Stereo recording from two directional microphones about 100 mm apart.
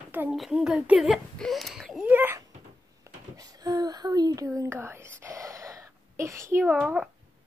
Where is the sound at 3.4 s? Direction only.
40° right (ahead or behind).